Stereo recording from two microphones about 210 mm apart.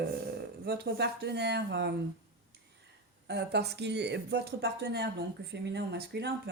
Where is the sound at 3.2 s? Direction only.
50° right (ahead or behind).